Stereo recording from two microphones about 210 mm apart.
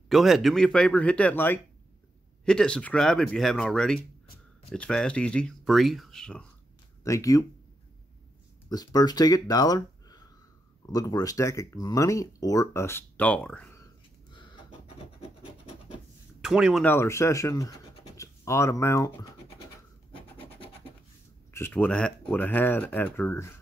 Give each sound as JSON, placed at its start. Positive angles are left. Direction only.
{"t": 0.1, "sound": "speech", "side_deg": 0}
{"t": 7.0, "sound": "speech", "side_deg": 15}
{"t": 8.6, "sound": "speech", "side_deg": 20}
{"t": 14.3, "sound": "a sound", "side_deg": 20}
{"t": 16.3, "sound": "speech", "side_deg": 0}
{"t": 16.8, "sound": "speech", "side_deg": 10}
{"t": 20.3, "sound": "scratch", "side_deg": 25}
{"t": 21.5, "sound": "speech", "side_deg": 10}